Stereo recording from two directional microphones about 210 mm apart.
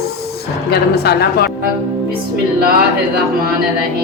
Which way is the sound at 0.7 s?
50° left (ahead or behind).